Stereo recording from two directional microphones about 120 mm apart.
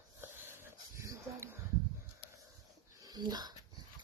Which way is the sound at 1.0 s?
25° right (ahead or behind).